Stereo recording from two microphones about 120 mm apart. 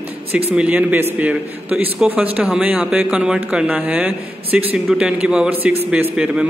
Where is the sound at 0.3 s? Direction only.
15° right (ahead or behind).